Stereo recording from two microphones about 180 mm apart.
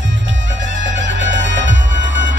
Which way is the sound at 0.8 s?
90° right.